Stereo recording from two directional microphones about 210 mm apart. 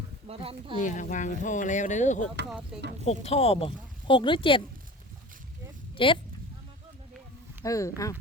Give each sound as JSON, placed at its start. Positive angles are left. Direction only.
{"t": 0.3, "sound": "speech", "side_deg": -25}
{"t": 0.8, "sound": "speech", "side_deg": 35}
{"t": 6.0, "sound": "speech", "side_deg": 25}
{"t": 7.6, "sound": "speech", "side_deg": 15}